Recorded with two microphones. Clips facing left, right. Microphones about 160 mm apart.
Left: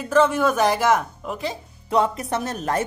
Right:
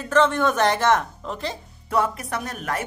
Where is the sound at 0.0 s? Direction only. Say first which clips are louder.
Left 1 dB; 5° left (ahead or behind).